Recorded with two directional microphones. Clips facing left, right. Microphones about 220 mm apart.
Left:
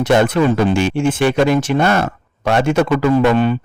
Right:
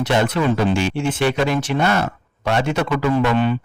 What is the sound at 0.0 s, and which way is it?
Speech, 50° left (ahead or behind).